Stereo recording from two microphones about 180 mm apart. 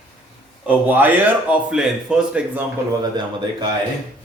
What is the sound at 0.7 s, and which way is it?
Speech, 10° right (ahead or behind).